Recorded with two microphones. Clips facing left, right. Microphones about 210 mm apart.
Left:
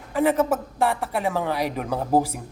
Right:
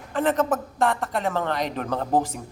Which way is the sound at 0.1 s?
10° left (ahead or behind).